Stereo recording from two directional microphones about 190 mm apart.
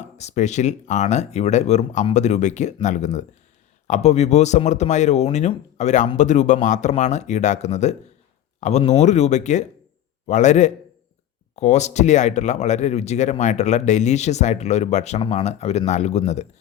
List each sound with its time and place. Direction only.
0.0 s speech: 35° left (ahead or behind)